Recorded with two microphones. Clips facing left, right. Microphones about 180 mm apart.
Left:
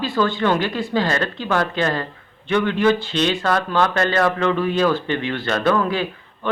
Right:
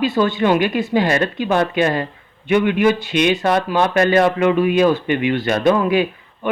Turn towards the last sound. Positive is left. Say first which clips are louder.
# right 6 dB
turn(degrees=-15)  # may be behind; listen again after turning